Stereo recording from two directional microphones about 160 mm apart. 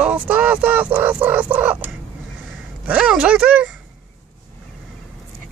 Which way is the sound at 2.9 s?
5° right (ahead or behind).